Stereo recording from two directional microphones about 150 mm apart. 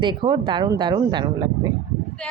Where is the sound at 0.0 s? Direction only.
30° right (ahead or behind).